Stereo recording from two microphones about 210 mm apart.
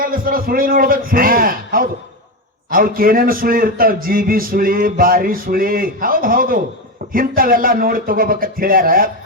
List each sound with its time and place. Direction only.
0.0 s a man's voice: 40° right (ahead or behind)